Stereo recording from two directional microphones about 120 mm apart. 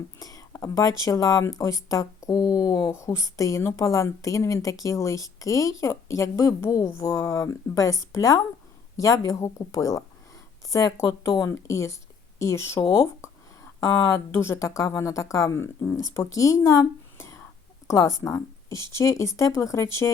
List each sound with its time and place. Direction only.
0.2 s speech: 30° left (ahead or behind)
12.9 s a sound: 25° left (ahead or behind)
14.0 s speech: 20° left (ahead or behind)